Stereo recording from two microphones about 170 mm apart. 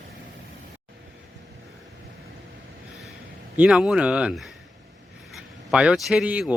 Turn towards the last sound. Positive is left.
turn(degrees=-5)  # may be behind; listen again after turning